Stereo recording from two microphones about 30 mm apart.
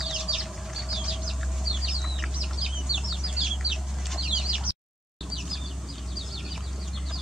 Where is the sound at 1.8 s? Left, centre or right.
Centre.